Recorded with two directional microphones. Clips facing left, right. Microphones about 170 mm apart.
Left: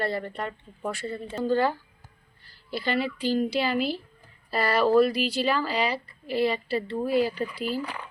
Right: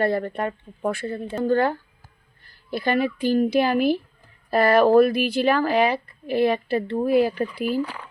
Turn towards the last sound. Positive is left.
turn(degrees=-50)  # may be behind; listen again after turning